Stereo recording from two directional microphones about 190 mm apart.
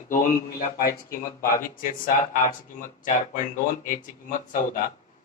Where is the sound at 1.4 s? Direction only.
45° left (ahead or behind).